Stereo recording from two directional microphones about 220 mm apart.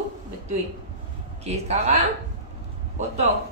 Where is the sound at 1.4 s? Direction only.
30° right (ahead or behind).